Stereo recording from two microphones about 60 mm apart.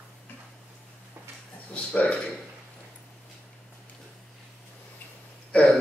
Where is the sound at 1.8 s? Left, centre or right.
Left.